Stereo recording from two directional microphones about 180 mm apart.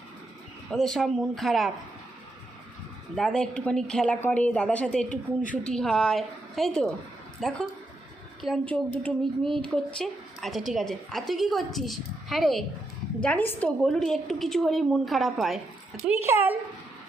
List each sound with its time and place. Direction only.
0.7 s a woman's voice: 5° left (ahead or behind)
3.2 s a woman's voice: 5° left (ahead or behind)
5.0 s speech: 45° left (ahead or behind)
5.6 s a woman's voice: 5° left (ahead or behind)
16.0 s speech: 10° right (ahead or behind)